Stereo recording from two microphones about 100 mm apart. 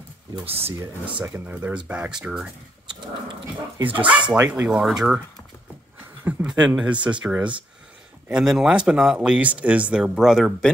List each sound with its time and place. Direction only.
1.0 s speech: 15° right (ahead or behind)
4.0 s speech: 10° right (ahead or behind)
6.2 s speech: 10° right (ahead or behind)